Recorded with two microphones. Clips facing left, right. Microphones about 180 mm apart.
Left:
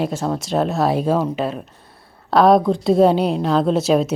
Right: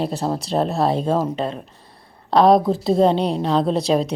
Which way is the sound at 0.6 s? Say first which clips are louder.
Left 2 dB; centre (ahead or behind).